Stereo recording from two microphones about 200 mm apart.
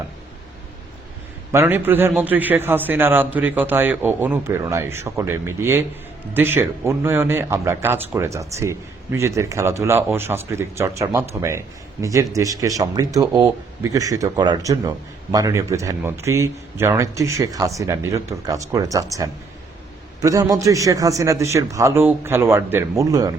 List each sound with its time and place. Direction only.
1.5 s speech: 10° right (ahead or behind)